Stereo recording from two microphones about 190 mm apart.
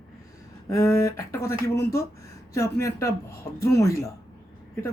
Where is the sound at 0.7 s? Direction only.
15° left (ahead or behind).